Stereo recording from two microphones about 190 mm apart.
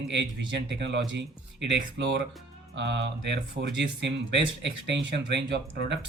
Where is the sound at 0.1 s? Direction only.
65° right (ahead or behind).